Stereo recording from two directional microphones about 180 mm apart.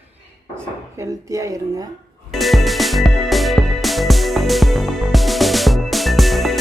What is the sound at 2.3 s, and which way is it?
Music, centre (ahead or behind).